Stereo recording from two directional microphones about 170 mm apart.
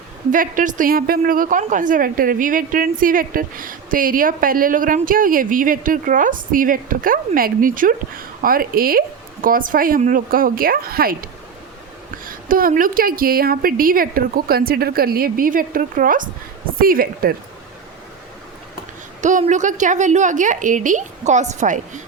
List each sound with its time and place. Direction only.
0.3 s a woman's voice: 50° right (ahead or behind)
19.2 s a woman's voice: 45° right (ahead or behind)